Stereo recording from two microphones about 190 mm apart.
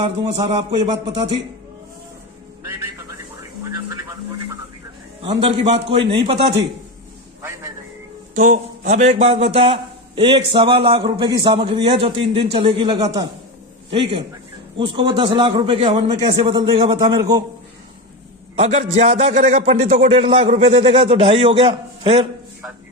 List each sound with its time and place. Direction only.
0.0 s a man's voice: 25° right (ahead or behind)
5.2 s a man's voice: 25° right (ahead or behind)
8.4 s a man's voice: 45° right (ahead or behind); by 17.4 s 20° right (ahead or behind)
18.5 s a man's voice: 35° right (ahead or behind)